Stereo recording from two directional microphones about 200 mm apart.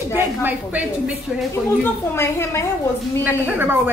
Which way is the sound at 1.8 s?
10° left (ahead or behind).